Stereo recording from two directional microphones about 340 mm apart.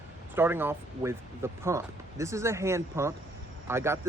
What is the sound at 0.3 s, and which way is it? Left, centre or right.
Speech, centre.